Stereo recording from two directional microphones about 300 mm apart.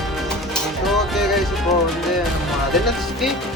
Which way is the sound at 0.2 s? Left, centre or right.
Centre.